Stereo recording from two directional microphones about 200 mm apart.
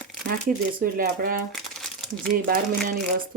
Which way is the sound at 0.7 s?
45° right (ahead or behind).